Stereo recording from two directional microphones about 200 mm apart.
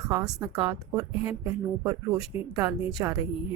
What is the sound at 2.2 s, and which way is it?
Speech, 30° left (ahead or behind).